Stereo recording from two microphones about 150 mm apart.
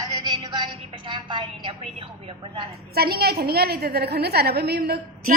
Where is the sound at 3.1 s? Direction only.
90° right.